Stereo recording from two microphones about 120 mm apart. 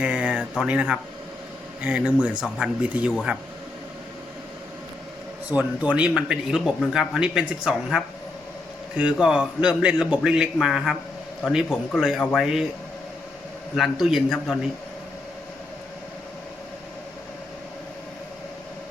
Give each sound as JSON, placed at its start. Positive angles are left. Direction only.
{"t": 0.0, "sound": "a man's voice", "side_deg": -10}
{"t": 5.5, "sound": "a man's voice", "side_deg": -10}
{"t": 13.7, "sound": "speech", "side_deg": 0}